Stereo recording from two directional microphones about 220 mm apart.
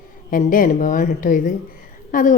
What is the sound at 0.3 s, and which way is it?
Speech, 40° left (ahead or behind).